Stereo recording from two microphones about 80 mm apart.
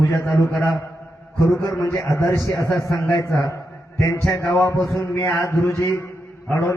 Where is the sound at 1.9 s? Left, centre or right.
Left.